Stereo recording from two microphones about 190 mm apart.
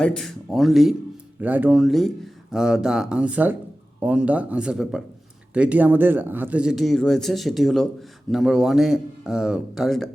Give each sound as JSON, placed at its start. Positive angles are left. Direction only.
{"t": 0.0, "sound": "speech", "side_deg": 5}